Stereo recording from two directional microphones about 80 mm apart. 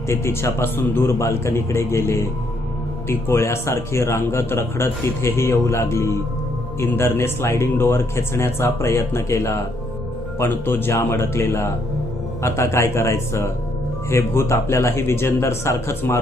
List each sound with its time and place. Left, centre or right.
0.1 s a man's voice: left